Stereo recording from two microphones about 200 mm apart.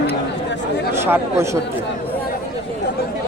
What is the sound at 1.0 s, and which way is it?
Speech, 10° right (ahead or behind).